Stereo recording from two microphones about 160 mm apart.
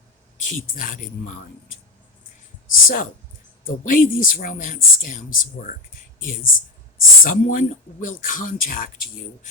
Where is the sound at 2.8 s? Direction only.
55° left (ahead or behind).